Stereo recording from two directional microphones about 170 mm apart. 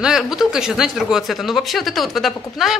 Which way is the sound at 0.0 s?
5° right (ahead or behind).